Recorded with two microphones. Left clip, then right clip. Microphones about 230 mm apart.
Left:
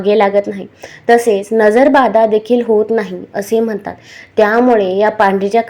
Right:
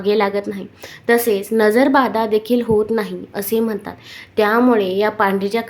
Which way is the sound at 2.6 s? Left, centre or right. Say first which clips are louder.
Left 5 dB; centre.